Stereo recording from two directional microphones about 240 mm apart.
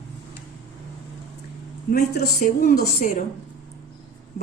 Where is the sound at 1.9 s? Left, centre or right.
Left.